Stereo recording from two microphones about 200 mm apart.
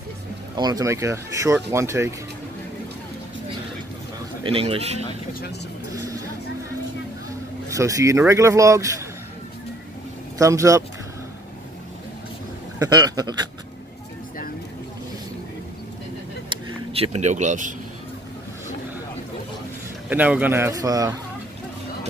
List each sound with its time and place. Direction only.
0.6 s speech: 20° right (ahead or behind)
4.4 s a man's voice: 30° right (ahead or behind)
7.7 s speech: 15° right (ahead or behind)
10.4 s speech: 15° right (ahead or behind)
12.7 s a man's voice: 20° right (ahead or behind)
16.9 s speech: 30° right (ahead or behind)
20.1 s speech: 5° right (ahead or behind)